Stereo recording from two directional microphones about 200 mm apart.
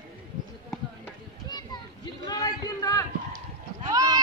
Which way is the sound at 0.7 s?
15° left (ahead or behind).